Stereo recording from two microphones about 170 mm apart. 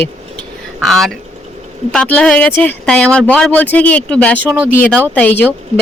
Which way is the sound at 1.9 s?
5° left (ahead or behind).